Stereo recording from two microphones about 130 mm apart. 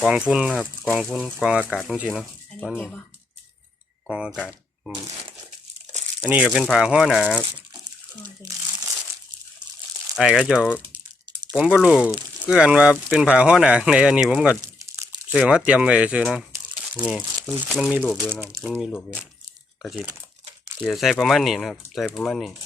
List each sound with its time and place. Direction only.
0.0 s speech: 5° right (ahead or behind)
4.1 s speech: 5° right (ahead or behind)
6.2 s speech: 10° right (ahead or behind)
6.5 s speech: centre (ahead or behind)
10.2 s speech: 5° right (ahead or behind)
14.6 s crumpling: 25° right (ahead or behind)
15.3 s speech: 5° right (ahead or behind)
17.7 s speech: 5° right (ahead or behind)
18.3 s speech: 15° right (ahead or behind)
18.9 s speech: 10° left (ahead or behind)
20.8 s speech: centre (ahead or behind)